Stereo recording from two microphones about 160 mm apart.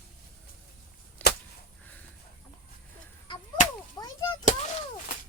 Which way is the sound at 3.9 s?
25° left (ahead or behind).